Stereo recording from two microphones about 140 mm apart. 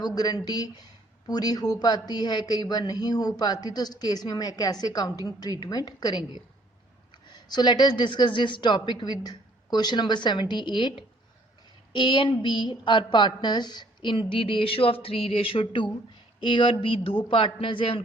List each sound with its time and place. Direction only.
0.0 s a woman's voice: 30° left (ahead or behind)